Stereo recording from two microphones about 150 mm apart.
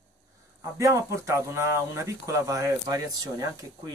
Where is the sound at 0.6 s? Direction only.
20° right (ahead or behind).